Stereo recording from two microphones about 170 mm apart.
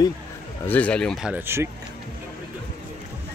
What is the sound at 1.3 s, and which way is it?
Speech, 15° right (ahead or behind).